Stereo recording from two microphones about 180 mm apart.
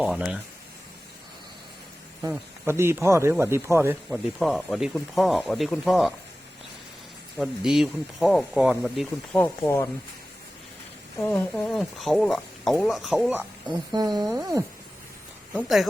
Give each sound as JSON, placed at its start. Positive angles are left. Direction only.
{"t": 0.0, "sound": "speech", "side_deg": -5}
{"t": 2.3, "sound": "speech", "side_deg": -15}
{"t": 4.1, "sound": "speech", "side_deg": 0}
{"t": 7.3, "sound": "speech", "side_deg": 0}
{"t": 9.4, "sound": "speech", "side_deg": 15}
{"t": 11.3, "sound": "speech", "side_deg": 0}
{"t": 13.7, "sound": "speech", "side_deg": -25}
{"t": 15.5, "sound": "speech", "side_deg": 0}